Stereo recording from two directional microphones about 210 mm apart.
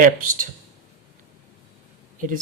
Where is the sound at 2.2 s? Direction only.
40° right (ahead or behind).